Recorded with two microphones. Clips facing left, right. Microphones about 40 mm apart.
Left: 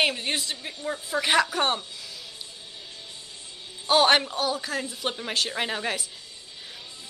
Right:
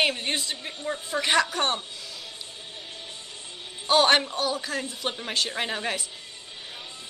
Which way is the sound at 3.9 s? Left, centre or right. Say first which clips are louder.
Even; centre.